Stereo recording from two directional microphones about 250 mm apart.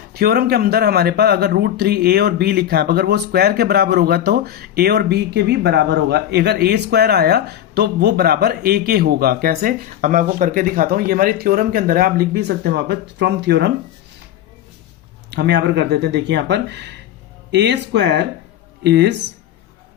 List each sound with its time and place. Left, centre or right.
0.1 s speech: right
15.3 s speech: right